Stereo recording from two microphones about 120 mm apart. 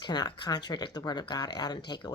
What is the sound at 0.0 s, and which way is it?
Speech, 35° left (ahead or behind).